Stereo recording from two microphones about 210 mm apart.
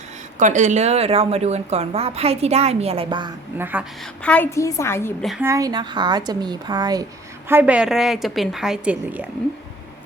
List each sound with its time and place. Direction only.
0.3 s speech: 35° right (ahead or behind)
3.6 s a woman's voice: 10° right (ahead or behind)
4.2 s a woman's voice: 5° left (ahead or behind)
5.2 s a woman's voice: centre (ahead or behind)
5.5 s a woman's voice: 15° right (ahead or behind)